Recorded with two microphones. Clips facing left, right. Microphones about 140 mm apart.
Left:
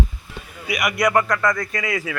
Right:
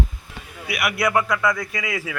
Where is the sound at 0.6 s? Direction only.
5° right (ahead or behind).